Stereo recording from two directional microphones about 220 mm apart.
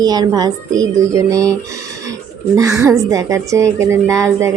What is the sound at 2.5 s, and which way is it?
Speech, 15° right (ahead or behind).